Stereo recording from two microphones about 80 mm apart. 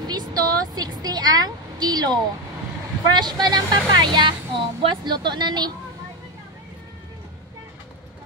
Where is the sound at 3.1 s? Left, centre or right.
Right.